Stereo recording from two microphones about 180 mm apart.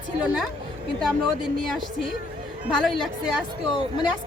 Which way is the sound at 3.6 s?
25° left (ahead or behind).